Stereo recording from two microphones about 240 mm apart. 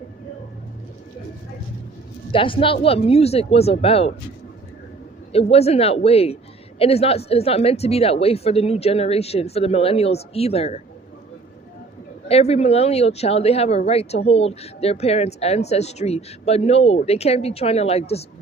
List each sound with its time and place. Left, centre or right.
2.3 s speech: left
5.3 s speech: left
12.3 s speech: left